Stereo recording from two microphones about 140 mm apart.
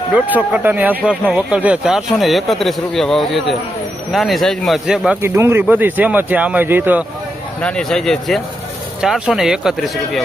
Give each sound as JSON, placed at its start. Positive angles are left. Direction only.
{"t": 0.1, "sound": "speech", "side_deg": -10}
{"t": 5.2, "sound": "a man's voice", "side_deg": -20}
{"t": 7.6, "sound": "speech", "side_deg": 5}